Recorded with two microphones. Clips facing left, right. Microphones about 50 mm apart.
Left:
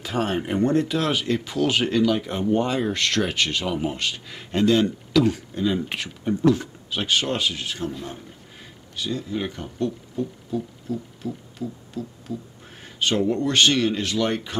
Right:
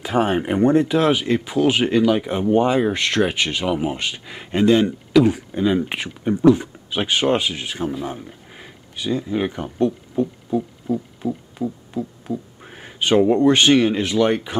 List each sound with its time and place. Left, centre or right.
0.0 s speech: centre
10.1 s music: right
13.2 s speech: right